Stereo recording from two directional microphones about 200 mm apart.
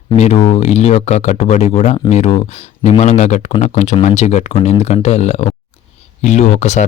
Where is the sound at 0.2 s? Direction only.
35° left (ahead or behind).